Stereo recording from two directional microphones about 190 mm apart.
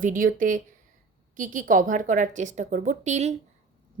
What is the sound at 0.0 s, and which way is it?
A woman's voice, 45° right (ahead or behind).